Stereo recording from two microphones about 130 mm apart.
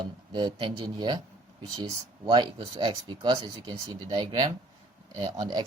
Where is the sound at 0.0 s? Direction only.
35° right (ahead or behind).